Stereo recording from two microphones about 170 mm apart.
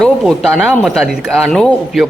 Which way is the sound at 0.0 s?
Centre (ahead or behind).